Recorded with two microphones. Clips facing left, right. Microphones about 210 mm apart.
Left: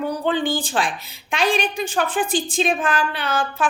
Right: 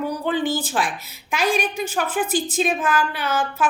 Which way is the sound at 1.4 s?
30° left (ahead or behind).